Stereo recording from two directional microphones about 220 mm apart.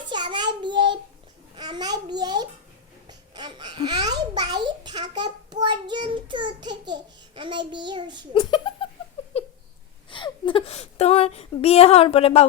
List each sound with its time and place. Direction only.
0.1 s child singing: 20° right (ahead or behind)
1.5 s a child's voice: 20° right (ahead or behind)
8.3 s speech: 20° left (ahead or behind)
9.3 s a sound: 25° left (ahead or behind)
10.1 s speech: 20° left (ahead or behind)